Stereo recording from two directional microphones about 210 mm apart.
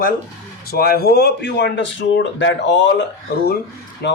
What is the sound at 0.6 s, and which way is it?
Speech, 45° left (ahead or behind).